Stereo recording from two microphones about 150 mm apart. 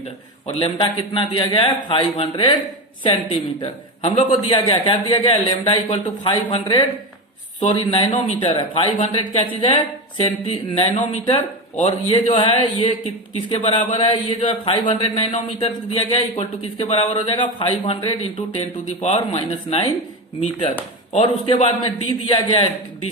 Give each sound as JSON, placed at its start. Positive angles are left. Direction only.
{"t": 0.4, "sound": "speech", "side_deg": 35}